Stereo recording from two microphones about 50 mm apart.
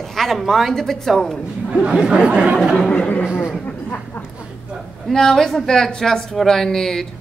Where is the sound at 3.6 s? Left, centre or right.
Left.